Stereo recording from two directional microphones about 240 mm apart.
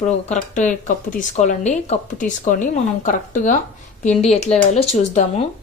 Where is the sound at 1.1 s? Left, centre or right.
Left.